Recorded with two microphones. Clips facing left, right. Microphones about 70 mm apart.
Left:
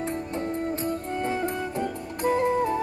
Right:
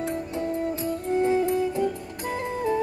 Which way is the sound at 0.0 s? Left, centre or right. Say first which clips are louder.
Right 1 dB; left.